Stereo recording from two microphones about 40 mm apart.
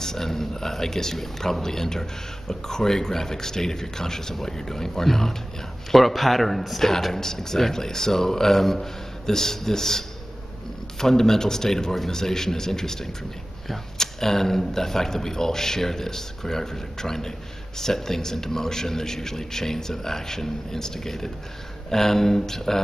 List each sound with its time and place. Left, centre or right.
0.0 s speech: centre